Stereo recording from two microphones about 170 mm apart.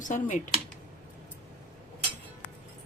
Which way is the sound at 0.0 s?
50° left (ahead or behind).